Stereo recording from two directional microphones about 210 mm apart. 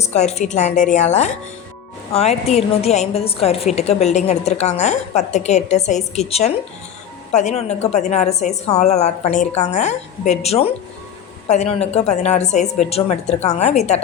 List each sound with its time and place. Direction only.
0.0 s a woman's voice: 30° left (ahead or behind)